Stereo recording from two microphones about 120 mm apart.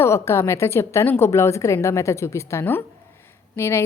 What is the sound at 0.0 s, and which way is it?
A woman's voice, 20° left (ahead or behind).